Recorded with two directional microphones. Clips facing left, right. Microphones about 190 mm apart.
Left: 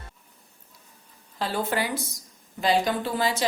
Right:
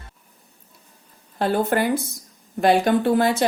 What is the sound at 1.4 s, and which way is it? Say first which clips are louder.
A woman's voice: right 7 dB; 55° right (ahead or behind).